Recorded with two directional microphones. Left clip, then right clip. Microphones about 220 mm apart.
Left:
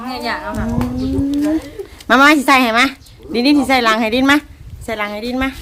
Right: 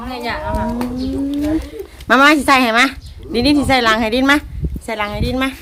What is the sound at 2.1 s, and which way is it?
Speech, 5° left (ahead or behind).